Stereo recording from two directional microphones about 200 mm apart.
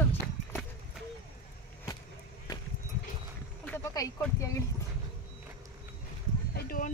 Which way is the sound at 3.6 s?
15° left (ahead or behind).